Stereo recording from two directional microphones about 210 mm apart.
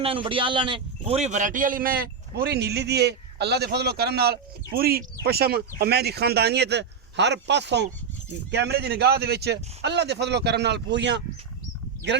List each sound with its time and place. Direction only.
0.0 s a man's voice: 25° right (ahead or behind); by 11.2 s 55° right (ahead or behind)